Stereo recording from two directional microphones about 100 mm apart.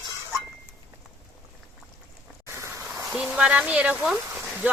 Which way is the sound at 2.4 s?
30° right (ahead or behind).